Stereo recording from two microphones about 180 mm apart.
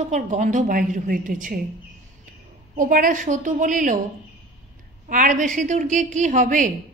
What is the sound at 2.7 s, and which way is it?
A man's voice, 50° right (ahead or behind).